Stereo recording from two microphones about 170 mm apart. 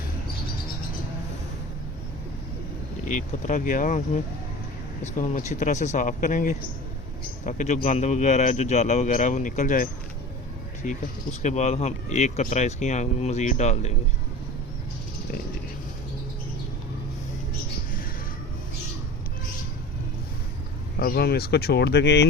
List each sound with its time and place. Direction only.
3.4 s a man's voice: 50° left (ahead or behind)
21.0 s speech: 65° left (ahead or behind); by 22.3 s 80° left